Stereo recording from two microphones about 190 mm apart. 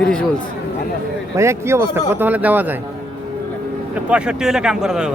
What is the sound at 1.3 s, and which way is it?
Speech, 15° right (ahead or behind).